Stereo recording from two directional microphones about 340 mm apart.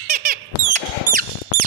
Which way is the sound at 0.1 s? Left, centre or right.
Right.